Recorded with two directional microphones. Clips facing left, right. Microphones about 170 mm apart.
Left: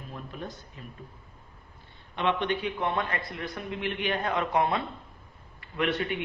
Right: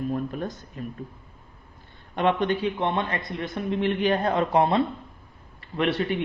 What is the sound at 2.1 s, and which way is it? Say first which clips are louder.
Speech: right 5 dB; 45° right (ahead or behind).